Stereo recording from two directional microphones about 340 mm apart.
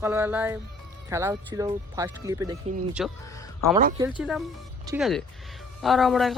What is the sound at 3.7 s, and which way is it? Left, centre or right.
Speech, right.